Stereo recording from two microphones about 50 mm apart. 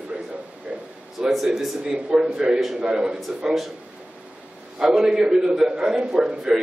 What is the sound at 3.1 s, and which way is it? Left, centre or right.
Speech, centre.